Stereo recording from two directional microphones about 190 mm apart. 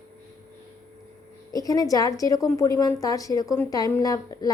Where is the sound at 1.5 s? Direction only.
20° left (ahead or behind).